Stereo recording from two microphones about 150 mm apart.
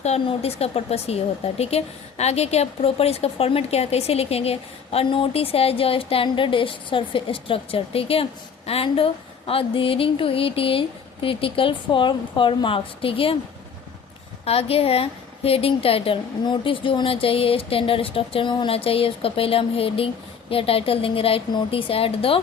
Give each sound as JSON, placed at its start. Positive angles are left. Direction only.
{"t": 0.0, "sound": "a woman's voice", "side_deg": 45}
{"t": 14.4, "sound": "a woman's voice", "side_deg": 40}